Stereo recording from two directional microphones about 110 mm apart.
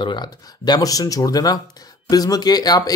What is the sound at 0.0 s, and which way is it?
Speech, 45° left (ahead or behind).